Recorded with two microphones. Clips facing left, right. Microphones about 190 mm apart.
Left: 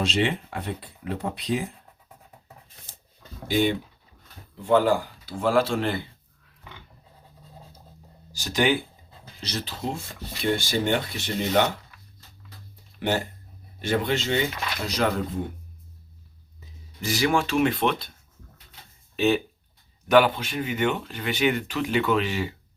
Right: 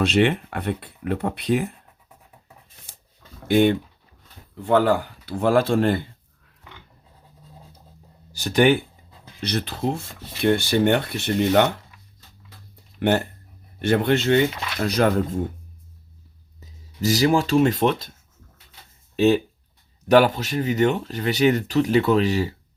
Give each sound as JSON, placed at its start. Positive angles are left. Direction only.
{"t": 0.0, "sound": "speech", "side_deg": -60}
{"t": 3.5, "sound": "speech", "side_deg": -60}
{"t": 8.3, "sound": "speech", "side_deg": -55}
{"t": 13.0, "sound": "speech", "side_deg": -60}
{"t": 16.6, "sound": "speech", "side_deg": -40}
{"t": 19.1, "sound": "speech", "side_deg": -40}